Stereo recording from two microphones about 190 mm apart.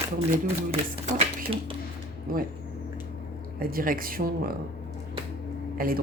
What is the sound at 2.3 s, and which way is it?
Speech, 50° right (ahead or behind).